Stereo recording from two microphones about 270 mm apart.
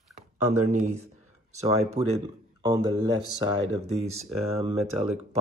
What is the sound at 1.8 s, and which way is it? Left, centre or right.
A man's voice, right.